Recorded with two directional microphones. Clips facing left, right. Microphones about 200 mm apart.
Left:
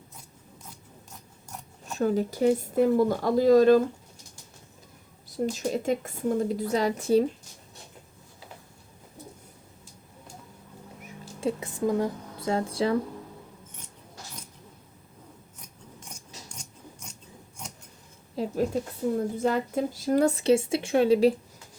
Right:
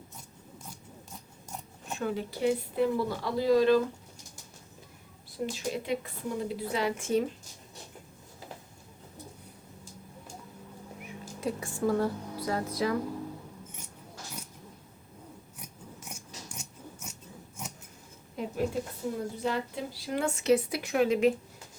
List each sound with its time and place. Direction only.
2.0 s a woman's voice: 40° left (ahead or behind)
5.3 s a woman's voice: 40° left (ahead or behind)
11.3 s a woman's voice: 25° left (ahead or behind)
12.5 s speech: 30° left (ahead or behind)
15.5 s scissors: 5° right (ahead or behind)
18.3 s a woman's voice: 40° left (ahead or behind)